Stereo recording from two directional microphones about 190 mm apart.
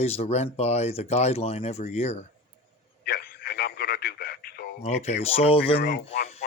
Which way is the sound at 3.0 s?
55° left (ahead or behind).